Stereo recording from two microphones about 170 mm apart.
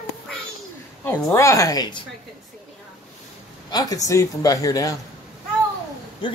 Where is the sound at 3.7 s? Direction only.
25° left (ahead or behind).